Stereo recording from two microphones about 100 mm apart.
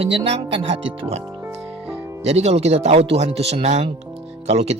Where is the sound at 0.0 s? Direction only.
70° right (ahead or behind).